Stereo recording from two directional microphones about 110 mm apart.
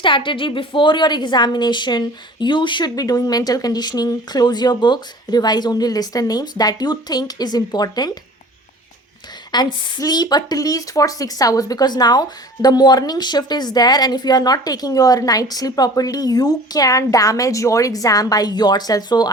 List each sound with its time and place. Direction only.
0.0 s a woman's voice: 50° left (ahead or behind)
9.5 s a woman's voice: 40° left (ahead or behind)